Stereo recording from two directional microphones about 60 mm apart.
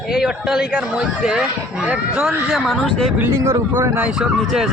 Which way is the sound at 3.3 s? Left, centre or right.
Right.